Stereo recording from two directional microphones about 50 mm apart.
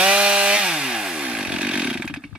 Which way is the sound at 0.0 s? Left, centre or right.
Right.